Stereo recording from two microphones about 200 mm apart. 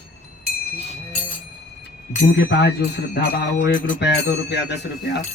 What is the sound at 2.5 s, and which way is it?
Music, 60° left (ahead or behind).